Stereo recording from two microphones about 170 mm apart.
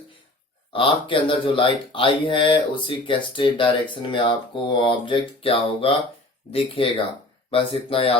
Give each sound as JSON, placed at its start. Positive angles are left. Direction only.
{"t": 0.7, "sound": "speech", "side_deg": 30}